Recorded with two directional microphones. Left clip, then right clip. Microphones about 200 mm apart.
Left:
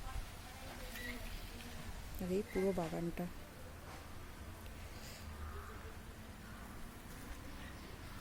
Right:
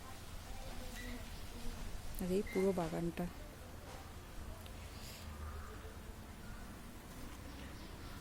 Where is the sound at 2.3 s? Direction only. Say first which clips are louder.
Right 1 dB; 5° right (ahead or behind).